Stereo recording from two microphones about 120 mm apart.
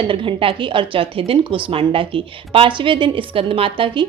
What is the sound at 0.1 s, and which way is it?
A woman's voice, 45° right (ahead or behind).